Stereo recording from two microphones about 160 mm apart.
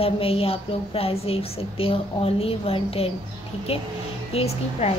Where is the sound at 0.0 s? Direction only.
35° left (ahead or behind).